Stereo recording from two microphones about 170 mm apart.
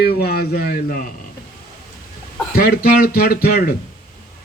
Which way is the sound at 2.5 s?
60° left (ahead or behind).